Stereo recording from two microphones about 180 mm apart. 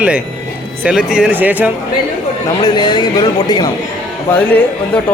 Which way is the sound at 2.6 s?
25° left (ahead or behind).